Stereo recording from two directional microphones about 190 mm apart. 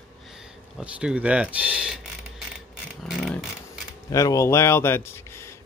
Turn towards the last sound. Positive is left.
turn(degrees=15)  # may be behind; listen again after turning